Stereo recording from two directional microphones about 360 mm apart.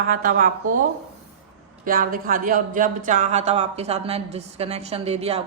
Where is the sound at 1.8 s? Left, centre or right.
Right.